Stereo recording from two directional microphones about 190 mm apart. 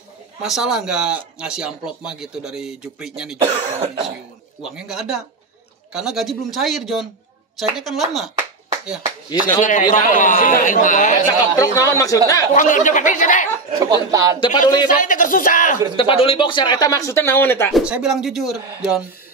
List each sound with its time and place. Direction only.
0.4 s speech: centre (ahead or behind)
3.4 s throat clearing: 30° right (ahead or behind)
4.6 s speech: 5° right (ahead or behind)
9.4 s a man's voice: 40° left (ahead or behind)
11.5 s speech: 15° left (ahead or behind)
12.5 s speech: 40° left (ahead or behind)
13.7 s speech: 20° right (ahead or behind)
14.4 s speech: 20° left (ahead or behind)
14.9 s a man's voice: 45° left (ahead or behind)
16.0 s speech: 30° left (ahead or behind); by 17.7 s 10° left (ahead or behind)
17.7 s speech: 5° right (ahead or behind)